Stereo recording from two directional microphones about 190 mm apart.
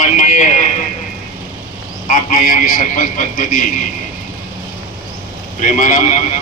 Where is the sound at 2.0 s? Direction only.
45° left (ahead or behind).